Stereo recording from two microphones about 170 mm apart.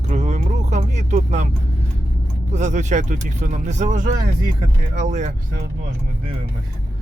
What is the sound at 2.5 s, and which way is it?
Speech, 45° right (ahead or behind).